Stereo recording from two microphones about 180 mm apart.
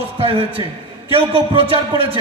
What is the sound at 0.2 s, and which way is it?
A man's voice, 30° right (ahead or behind).